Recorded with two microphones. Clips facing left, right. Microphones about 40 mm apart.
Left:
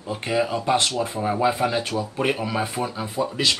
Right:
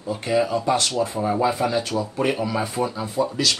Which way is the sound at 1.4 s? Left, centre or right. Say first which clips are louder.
Left 1 dB; centre.